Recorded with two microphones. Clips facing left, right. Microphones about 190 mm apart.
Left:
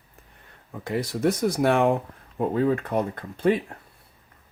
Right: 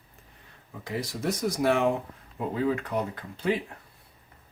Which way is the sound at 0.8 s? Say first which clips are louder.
Left 6 dB; 55° left (ahead or behind).